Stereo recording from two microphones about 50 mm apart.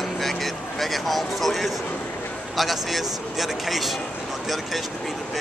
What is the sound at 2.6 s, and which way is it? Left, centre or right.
Speech, centre.